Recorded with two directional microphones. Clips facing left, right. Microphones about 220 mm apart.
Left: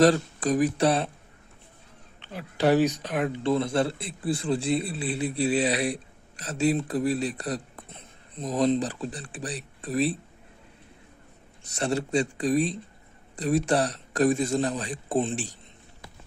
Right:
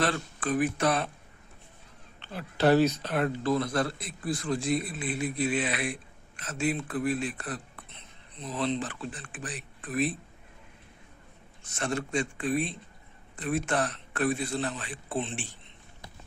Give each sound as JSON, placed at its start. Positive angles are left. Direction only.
{"t": 0.0, "sound": "a man's voice", "side_deg": 40}
{"t": 2.2, "sound": "speech", "side_deg": 15}
{"t": 3.4, "sound": "a man's voice", "side_deg": 25}
{"t": 11.8, "sound": "a man's voice", "side_deg": 35}